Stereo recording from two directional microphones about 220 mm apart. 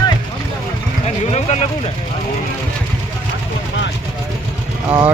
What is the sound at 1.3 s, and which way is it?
Speech, 30° left (ahead or behind).